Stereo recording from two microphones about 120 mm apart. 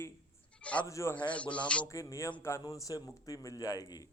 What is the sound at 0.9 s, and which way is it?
Speech, 25° left (ahead or behind).